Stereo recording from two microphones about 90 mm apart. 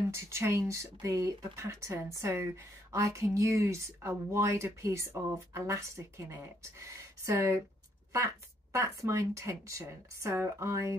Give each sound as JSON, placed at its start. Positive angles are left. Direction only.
{"t": 0.1, "sound": "speech", "side_deg": -30}
{"t": 8.7, "sound": "speech", "side_deg": -35}